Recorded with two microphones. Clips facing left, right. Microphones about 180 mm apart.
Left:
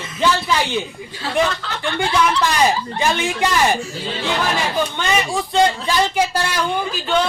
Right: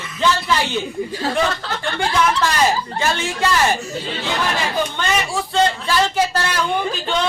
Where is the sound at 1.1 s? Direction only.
40° right (ahead or behind).